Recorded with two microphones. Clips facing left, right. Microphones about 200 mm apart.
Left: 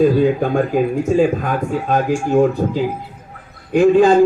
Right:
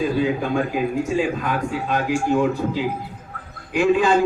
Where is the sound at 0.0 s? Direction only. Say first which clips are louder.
Left 7 dB; 50° left (ahead or behind).